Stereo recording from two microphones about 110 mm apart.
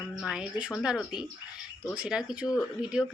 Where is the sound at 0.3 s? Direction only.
5° right (ahead or behind).